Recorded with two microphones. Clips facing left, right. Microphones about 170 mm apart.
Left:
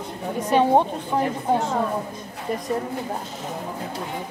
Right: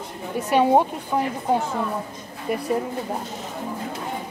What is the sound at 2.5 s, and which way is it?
Speech, 10° right (ahead or behind).